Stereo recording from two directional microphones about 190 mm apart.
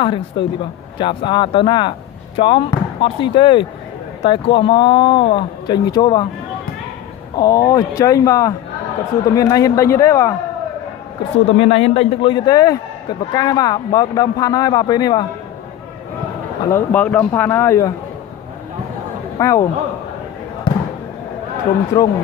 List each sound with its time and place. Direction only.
0.0 s speech: 25° left (ahead or behind)
7.3 s speech: 20° left (ahead or behind)
11.3 s a man's voice: 30° left (ahead or behind)
16.6 s speech: 10° left (ahead or behind)
19.3 s a man's voice: 15° left (ahead or behind)
21.9 s speech: 15° left (ahead or behind)